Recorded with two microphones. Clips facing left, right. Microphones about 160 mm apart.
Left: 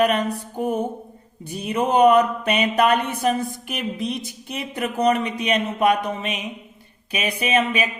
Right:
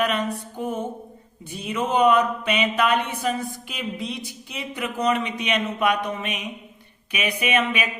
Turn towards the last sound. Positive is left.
turn(degrees=35)  # may be behind; listen again after turning